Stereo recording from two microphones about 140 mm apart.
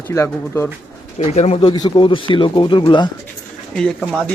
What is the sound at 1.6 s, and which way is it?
Speech, 35° left (ahead or behind).